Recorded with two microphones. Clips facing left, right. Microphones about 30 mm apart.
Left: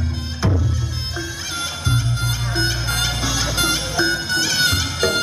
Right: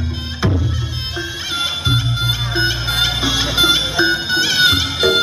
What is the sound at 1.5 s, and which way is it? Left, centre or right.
Music, right.